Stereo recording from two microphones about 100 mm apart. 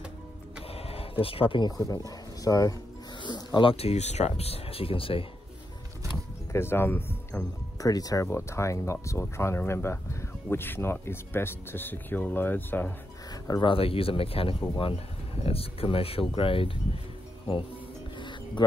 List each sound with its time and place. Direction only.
0.7 s a sound: 80° left; by 1.7 s 65° left (ahead or behind)
1.8 s speech: 35° left (ahead or behind)
3.2 s speech: 50° left (ahead or behind)
3.7 s speech: 90° left; by 5.2 s 65° left (ahead or behind)
6.5 s speech: 25° left (ahead or behind)
7.8 s speech: 35° left (ahead or behind); by 12.9 s 20° left (ahead or behind)
13.3 s music: 40° left (ahead or behind)
13.7 s speech: 70° left (ahead or behind)